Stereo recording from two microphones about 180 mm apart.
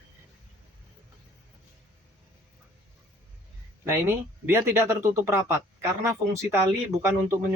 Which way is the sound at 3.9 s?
15° right (ahead or behind).